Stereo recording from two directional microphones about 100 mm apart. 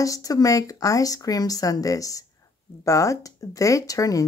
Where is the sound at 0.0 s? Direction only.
35° left (ahead or behind).